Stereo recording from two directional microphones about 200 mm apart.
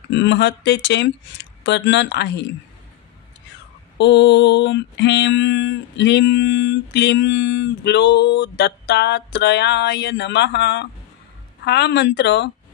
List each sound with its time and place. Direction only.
0.1 s mantra: 60° left (ahead or behind)
4.0 s mantra: 60° left (ahead or behind)